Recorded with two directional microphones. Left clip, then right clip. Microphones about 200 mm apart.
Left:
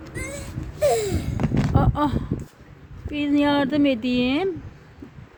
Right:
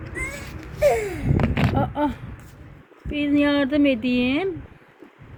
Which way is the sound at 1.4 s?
30° right (ahead or behind).